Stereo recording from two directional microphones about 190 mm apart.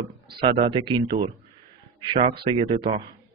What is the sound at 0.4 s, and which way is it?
Speech, 25° right (ahead or behind).